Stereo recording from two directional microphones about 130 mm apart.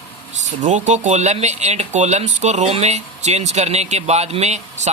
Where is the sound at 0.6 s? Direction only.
65° right (ahead or behind).